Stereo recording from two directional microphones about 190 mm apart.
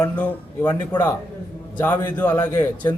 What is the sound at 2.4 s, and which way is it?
Speech, 20° left (ahead or behind).